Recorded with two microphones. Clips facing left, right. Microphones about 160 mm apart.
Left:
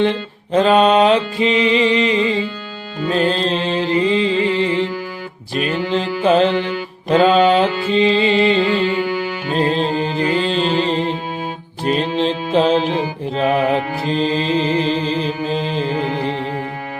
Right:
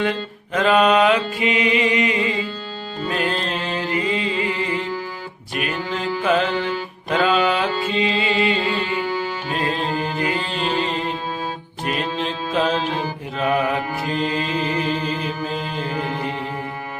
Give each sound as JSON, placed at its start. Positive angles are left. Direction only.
{"t": 0.0, "sound": "mantra", "side_deg": 30}
{"t": 3.1, "sound": "music", "side_deg": 30}
{"t": 5.5, "sound": "mantra", "side_deg": 30}
{"t": 7.1, "sound": "music", "side_deg": 30}